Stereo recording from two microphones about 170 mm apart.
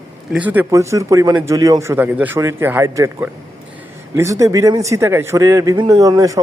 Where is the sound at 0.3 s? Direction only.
10° right (ahead or behind).